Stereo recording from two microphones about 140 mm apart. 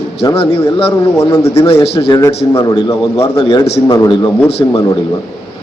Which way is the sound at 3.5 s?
30° left (ahead or behind).